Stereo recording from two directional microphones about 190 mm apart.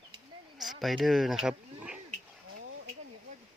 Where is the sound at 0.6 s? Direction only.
Centre (ahead or behind).